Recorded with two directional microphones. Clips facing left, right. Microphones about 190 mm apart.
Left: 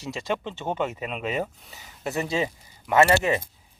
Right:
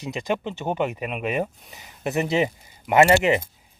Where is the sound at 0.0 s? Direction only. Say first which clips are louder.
Right 3 dB; 15° right (ahead or behind).